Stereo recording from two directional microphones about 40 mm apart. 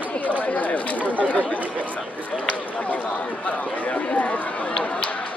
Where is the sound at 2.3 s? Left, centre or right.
Centre.